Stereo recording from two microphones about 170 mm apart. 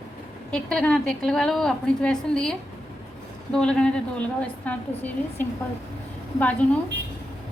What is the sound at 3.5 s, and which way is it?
A woman's voice, 5° left (ahead or behind).